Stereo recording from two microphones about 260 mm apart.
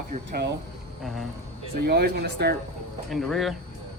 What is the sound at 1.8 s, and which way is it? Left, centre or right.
Speech, right.